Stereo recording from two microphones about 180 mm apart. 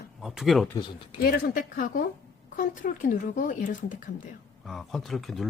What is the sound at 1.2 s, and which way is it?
Speech, 55° left (ahead or behind).